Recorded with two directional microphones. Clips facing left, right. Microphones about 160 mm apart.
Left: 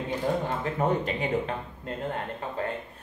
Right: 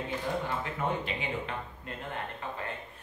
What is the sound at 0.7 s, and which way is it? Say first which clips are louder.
Speech: left 6 dB; 40° left (ahead or behind).